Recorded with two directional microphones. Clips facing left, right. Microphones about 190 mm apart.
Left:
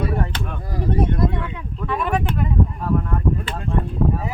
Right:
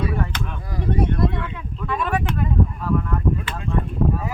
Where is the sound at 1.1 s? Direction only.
20° left (ahead or behind).